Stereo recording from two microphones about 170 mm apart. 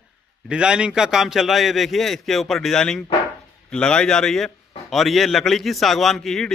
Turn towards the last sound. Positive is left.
turn(degrees=0)  # may be behind; listen again after turning